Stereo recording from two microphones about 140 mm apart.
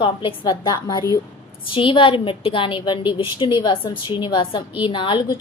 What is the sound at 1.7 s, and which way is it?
A woman's voice, 35° left (ahead or behind).